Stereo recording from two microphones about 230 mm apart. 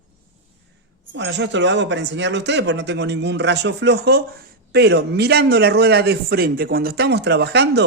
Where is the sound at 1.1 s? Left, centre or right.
Right.